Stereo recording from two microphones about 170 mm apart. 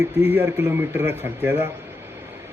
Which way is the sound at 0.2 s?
20° right (ahead or behind).